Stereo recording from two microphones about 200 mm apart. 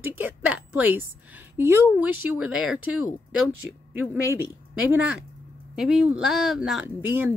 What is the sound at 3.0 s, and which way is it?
Speech, 90° left.